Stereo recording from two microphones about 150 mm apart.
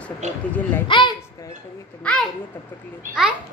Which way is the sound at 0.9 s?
30° left (ahead or behind).